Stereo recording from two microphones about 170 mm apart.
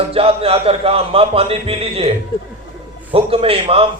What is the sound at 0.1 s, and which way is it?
A man's voice, 35° right (ahead or behind).